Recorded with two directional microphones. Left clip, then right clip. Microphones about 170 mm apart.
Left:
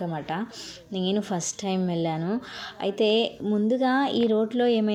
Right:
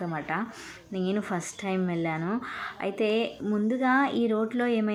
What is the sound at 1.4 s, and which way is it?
A woman's voice, 45° left (ahead or behind).